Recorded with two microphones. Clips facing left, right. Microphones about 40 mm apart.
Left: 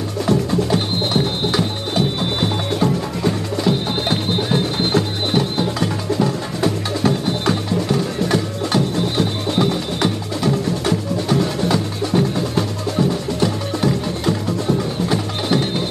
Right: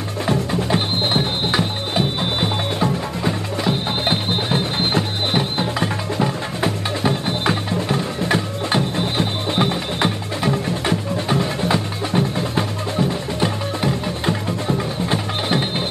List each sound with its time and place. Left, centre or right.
0.3 s music: right